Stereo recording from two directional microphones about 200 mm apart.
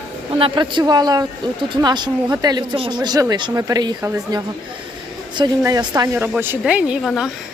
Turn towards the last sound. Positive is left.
turn(degrees=0)  # may be behind; listen again after turning